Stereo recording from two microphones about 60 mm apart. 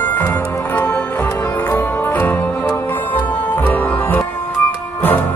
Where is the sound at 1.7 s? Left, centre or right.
Left.